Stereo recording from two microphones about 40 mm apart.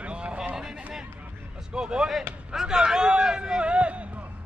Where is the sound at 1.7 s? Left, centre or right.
Centre.